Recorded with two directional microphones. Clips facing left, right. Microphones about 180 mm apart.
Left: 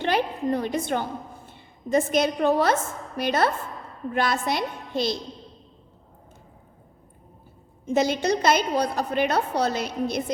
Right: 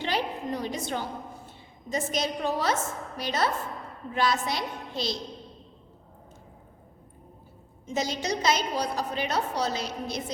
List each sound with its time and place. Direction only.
0.0 s a woman's voice: 55° left (ahead or behind)
7.9 s a woman's voice: 60° left (ahead or behind)